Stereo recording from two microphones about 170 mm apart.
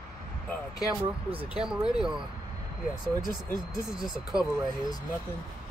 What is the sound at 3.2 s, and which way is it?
Speech, 55° left (ahead or behind).